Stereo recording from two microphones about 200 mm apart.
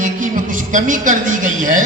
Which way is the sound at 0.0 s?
40° right (ahead or behind).